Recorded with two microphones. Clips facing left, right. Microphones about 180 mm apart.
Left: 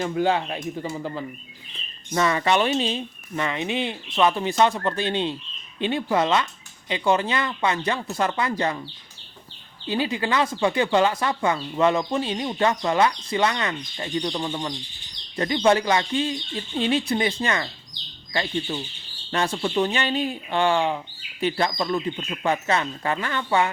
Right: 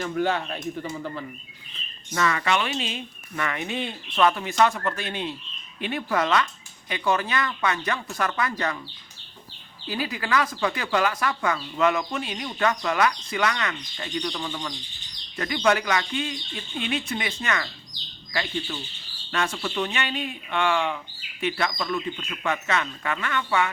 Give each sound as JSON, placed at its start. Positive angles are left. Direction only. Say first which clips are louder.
{"t": 0.0, "sound": "speech", "louder": "left 3 dB", "side_deg": 20}
{"t": 9.8, "sound": "speech", "louder": "left 5 dB", "side_deg": 25}
{"t": 19.3, "sound": "speech", "louder": "left 4 dB", "side_deg": 30}